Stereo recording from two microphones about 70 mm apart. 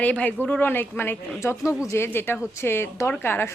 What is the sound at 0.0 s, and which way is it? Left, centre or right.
Speech, left.